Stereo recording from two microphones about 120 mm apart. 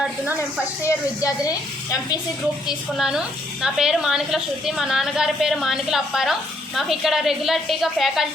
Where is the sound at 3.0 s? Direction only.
5° right (ahead or behind).